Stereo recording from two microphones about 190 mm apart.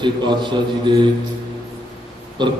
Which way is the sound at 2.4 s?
25° right (ahead or behind).